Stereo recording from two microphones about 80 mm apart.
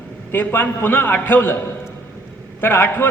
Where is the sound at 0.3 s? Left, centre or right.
Left.